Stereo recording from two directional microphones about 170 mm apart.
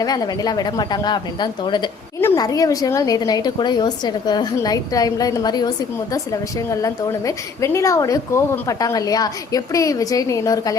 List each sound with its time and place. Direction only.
0.0 s a woman's voice: 20° left (ahead or behind)